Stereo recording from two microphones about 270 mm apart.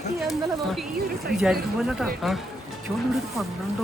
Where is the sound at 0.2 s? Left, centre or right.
Centre.